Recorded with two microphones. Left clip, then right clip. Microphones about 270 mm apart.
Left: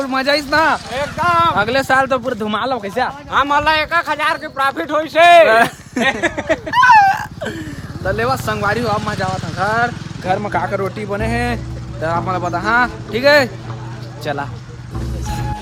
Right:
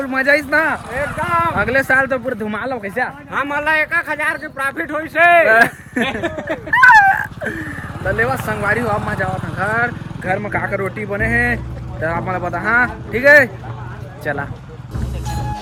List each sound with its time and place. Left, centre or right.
0.0 s speech: centre
5.5 s speech: centre
6.7 s a sound: centre
8.0 s speech: centre